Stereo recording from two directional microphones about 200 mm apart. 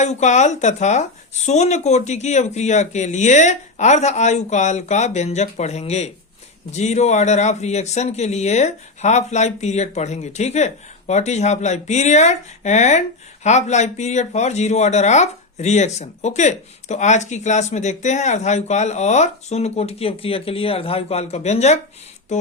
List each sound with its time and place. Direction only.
0.0 s speech: 35° left (ahead or behind)